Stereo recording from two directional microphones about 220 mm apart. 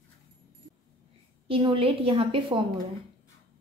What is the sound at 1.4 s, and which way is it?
A woman's voice, 25° right (ahead or behind).